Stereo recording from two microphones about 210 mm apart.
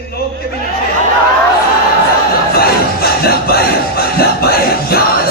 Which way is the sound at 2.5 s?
45° left (ahead or behind).